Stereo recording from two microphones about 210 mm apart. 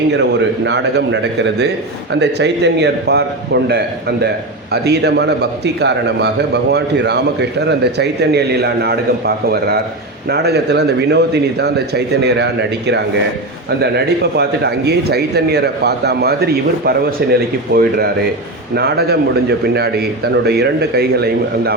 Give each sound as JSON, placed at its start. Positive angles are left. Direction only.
{"t": 0.1, "sound": "a man's voice", "side_deg": -55}
{"t": 13.7, "sound": "a man's voice", "side_deg": -50}